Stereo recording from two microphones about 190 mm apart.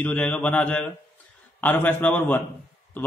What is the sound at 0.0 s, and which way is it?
A man's voice, 5° left (ahead or behind).